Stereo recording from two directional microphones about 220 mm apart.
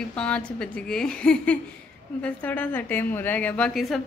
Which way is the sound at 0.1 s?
5° left (ahead or behind).